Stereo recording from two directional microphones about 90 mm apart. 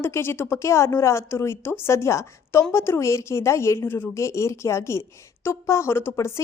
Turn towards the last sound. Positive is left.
turn(degrees=30)  # may be behind; listen again after turning